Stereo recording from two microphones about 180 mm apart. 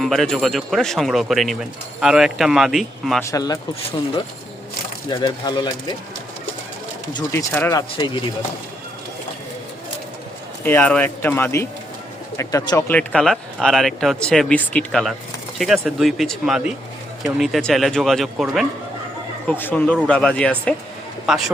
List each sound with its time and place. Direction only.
0.0 s speech: centre (ahead or behind)
3.2 s speech: 15° left (ahead or behind)
5.0 s speech: 25° left (ahead or behind)
7.1 s speech: 20° left (ahead or behind)
10.6 s speech: 10° left (ahead or behind)
13.0 s a man's voice: 5° left (ahead or behind)